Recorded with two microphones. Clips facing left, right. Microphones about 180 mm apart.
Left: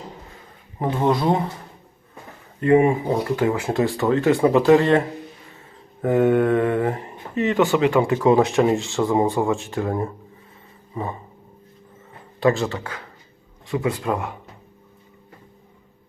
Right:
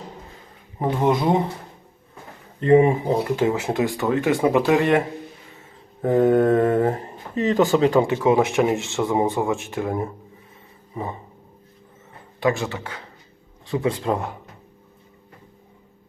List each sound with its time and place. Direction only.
0.8 s speech: 15° right (ahead or behind)
2.6 s speech: 30° right (ahead or behind)
6.0 s speech: 30° right (ahead or behind)
8.0 s speech: 20° right (ahead or behind)
12.4 s speech: 15° right (ahead or behind)